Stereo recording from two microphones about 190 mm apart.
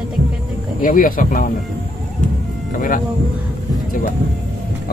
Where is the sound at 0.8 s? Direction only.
45° left (ahead or behind).